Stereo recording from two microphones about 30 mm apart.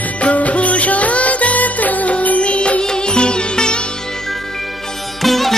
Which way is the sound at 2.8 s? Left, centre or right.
Left.